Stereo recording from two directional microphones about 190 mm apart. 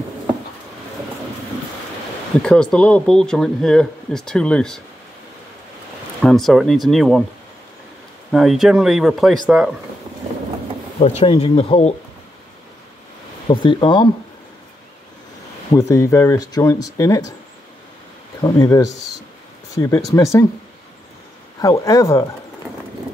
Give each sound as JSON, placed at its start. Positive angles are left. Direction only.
{"t": 2.4, "sound": "speech", "side_deg": 5}
{"t": 6.2, "sound": "speech", "side_deg": 0}
{"t": 8.3, "sound": "speech", "side_deg": 0}
{"t": 11.0, "sound": "speech", "side_deg": 35}
{"t": 13.5, "sound": "speech", "side_deg": 25}
{"t": 15.7, "sound": "speech", "side_deg": 15}
{"t": 18.4, "sound": "speech", "side_deg": 15}
{"t": 21.5, "sound": "speech", "side_deg": 15}